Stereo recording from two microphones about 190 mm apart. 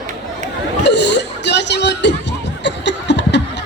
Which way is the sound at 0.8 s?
65° left (ahead or behind).